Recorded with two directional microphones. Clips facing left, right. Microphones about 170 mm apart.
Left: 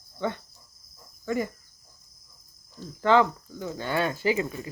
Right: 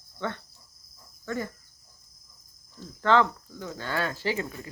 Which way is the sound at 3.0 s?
10° left (ahead or behind).